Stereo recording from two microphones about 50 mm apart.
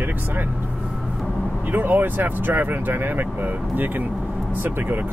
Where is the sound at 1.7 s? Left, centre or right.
Right.